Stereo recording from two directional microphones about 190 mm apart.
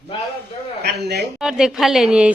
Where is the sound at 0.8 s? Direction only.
60° right (ahead or behind).